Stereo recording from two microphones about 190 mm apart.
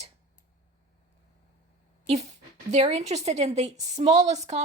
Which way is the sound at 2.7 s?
35° right (ahead or behind).